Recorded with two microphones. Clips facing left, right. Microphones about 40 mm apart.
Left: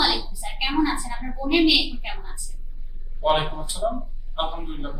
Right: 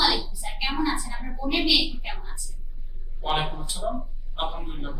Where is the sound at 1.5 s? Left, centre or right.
Centre.